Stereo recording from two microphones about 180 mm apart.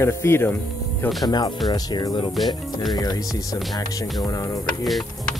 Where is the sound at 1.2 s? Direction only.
25° left (ahead or behind).